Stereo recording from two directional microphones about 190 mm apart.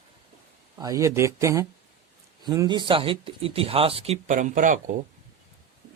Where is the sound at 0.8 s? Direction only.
15° right (ahead or behind); by 4.8 s 40° right (ahead or behind).